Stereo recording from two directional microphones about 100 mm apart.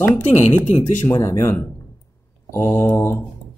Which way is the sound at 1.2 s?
30° left (ahead or behind).